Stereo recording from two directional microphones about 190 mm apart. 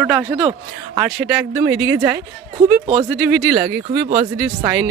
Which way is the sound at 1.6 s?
5° right (ahead or behind).